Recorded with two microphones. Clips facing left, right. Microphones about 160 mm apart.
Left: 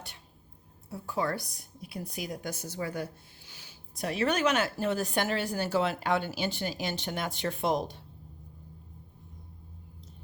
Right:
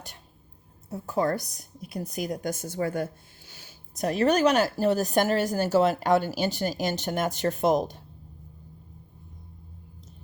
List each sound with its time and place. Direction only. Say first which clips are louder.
0.9 s a woman's voice: right 5 dB; 45° right (ahead or behind)